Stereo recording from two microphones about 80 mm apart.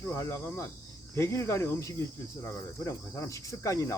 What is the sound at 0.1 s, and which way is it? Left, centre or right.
Speech, left.